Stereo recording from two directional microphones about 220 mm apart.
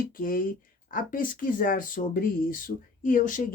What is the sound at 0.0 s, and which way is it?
Speech, 40° left (ahead or behind).